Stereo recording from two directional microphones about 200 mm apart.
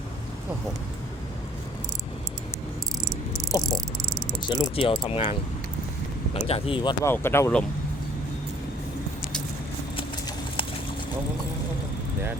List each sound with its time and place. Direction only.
4.4 s speech: 25° left (ahead or behind)
7.0 s speech: 10° left (ahead or behind)
10.0 s clip-clop: 25° left (ahead or behind)